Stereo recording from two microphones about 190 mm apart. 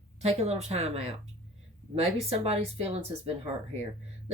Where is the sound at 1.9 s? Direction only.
35° right (ahead or behind).